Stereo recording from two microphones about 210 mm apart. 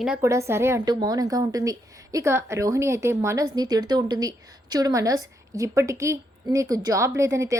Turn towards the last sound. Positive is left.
turn(degrees=-15)  # may be behind; listen again after turning